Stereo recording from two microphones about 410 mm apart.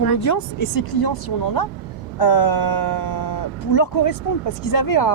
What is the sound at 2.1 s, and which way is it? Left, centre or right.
Speech, left.